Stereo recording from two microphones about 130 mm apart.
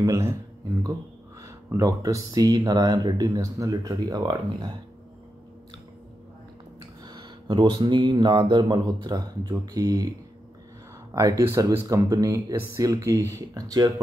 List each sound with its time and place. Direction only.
0.0 s speech: 25° right (ahead or behind)
1.4 s speech: 25° right (ahead or behind)
7.1 s speech: 35° right (ahead or behind)
11.1 s speech: 25° right (ahead or behind)